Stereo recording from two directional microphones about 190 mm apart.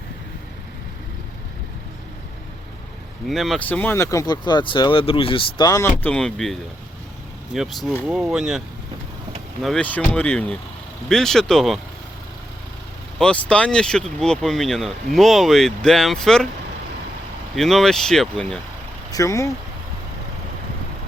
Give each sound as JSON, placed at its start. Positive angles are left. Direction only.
{"t": 3.2, "sound": "speech", "side_deg": 0}
{"t": 13.1, "sound": "speech", "side_deg": 5}
{"t": 17.5, "sound": "speech", "side_deg": 0}
{"t": 19.1, "sound": "speech", "side_deg": 15}